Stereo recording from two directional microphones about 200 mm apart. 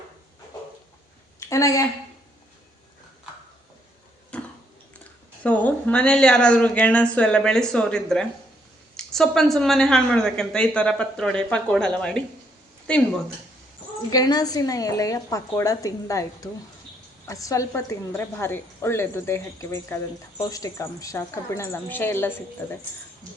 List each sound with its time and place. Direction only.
1.4 s a woman's voice: 15° left (ahead or behind)
4.3 s a sound: 5° left (ahead or behind)
5.4 s a woman's voice: 5° left (ahead or behind)
14.1 s a woman's voice: 20° left (ahead or behind)